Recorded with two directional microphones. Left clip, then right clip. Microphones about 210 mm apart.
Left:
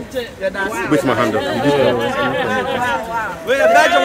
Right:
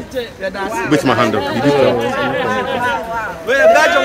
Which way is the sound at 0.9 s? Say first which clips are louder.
Right 2 dB; 50° right (ahead or behind).